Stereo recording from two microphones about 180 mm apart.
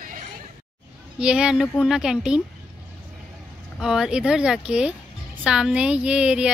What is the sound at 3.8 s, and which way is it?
Speech, 5° right (ahead or behind).